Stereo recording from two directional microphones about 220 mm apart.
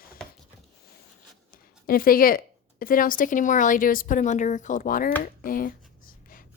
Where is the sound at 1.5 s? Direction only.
40° left (ahead or behind).